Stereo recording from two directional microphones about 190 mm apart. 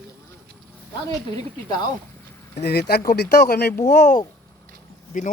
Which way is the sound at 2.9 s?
55° left (ahead or behind).